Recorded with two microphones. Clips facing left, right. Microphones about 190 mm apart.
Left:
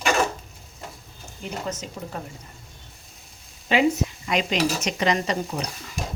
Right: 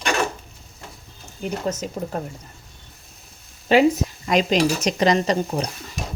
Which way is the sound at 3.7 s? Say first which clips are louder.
Right 5 dB; 35° right (ahead or behind).